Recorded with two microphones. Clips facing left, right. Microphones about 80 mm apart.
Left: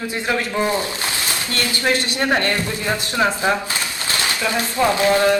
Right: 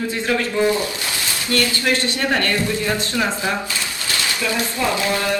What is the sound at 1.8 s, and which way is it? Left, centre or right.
Speech, left.